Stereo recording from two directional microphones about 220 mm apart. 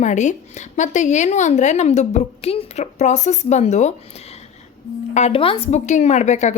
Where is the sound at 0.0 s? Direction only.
35° left (ahead or behind).